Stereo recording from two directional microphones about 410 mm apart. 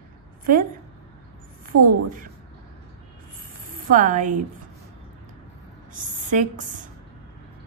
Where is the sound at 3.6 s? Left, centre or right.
Centre.